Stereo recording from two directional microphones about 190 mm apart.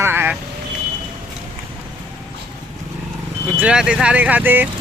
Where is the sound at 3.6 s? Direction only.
5° right (ahead or behind).